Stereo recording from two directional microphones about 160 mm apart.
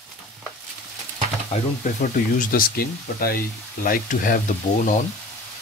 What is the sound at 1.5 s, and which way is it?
Speech, 50° left (ahead or behind).